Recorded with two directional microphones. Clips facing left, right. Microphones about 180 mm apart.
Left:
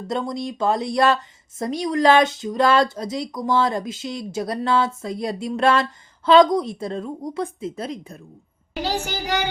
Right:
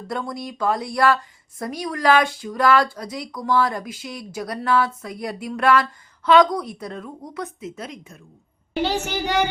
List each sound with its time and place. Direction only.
0.1 s a child's voice: 20° left (ahead or behind)